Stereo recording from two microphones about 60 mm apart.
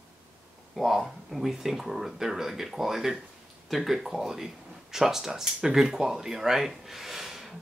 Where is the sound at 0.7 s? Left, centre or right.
Centre.